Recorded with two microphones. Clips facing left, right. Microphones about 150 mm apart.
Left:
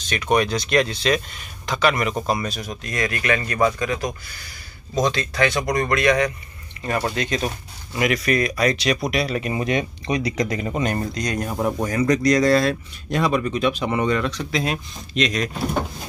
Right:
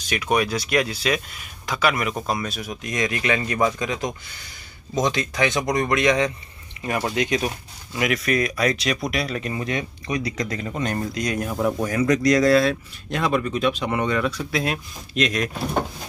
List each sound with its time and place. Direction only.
0.0 s speech: 10° right (ahead or behind)
7.9 s speech: centre (ahead or behind)
9.5 s speech: 20° left (ahead or behind)
11.1 s speech: 5° right (ahead or behind)